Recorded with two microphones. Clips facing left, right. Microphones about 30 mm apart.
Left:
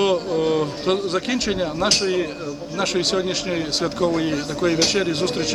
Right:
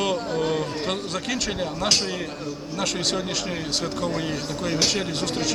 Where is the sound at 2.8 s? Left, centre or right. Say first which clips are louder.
Left 4 dB; left.